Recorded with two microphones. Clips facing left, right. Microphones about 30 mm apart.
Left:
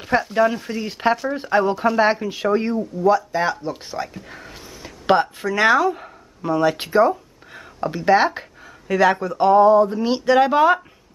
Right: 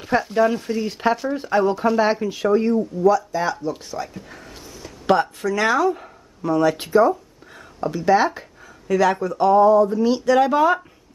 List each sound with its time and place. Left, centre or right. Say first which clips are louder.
0.0 s speech: even; centre
3.1 s speech: left 1 dB; left; by 6.6 s centre
6.6 s speech: even; left